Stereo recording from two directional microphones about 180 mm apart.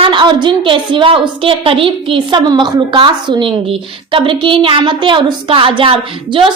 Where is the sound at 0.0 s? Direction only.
25° right (ahead or behind).